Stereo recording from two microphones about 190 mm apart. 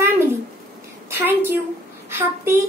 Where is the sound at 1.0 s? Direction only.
10° right (ahead or behind).